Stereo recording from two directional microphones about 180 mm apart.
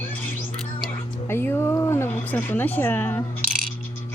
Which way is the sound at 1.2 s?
10° left (ahead or behind).